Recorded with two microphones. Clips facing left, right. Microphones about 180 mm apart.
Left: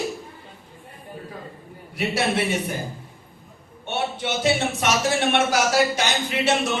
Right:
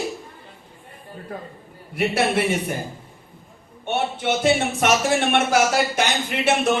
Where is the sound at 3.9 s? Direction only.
55° right (ahead or behind).